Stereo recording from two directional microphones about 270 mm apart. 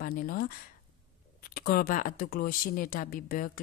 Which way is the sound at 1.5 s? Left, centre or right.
Left.